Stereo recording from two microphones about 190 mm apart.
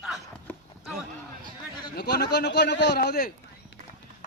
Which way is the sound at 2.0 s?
60° left (ahead or behind).